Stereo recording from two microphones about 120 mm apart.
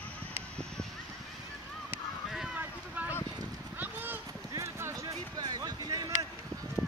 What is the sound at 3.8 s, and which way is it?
Clip-clop, 15° right (ahead or behind).